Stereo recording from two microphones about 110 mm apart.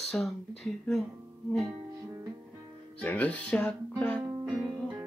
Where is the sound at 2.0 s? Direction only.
30° right (ahead or behind).